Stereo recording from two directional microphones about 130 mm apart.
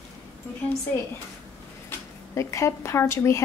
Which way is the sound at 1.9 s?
25° left (ahead or behind).